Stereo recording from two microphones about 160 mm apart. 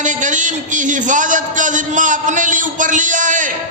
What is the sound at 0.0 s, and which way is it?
A man's voice, 50° right (ahead or behind).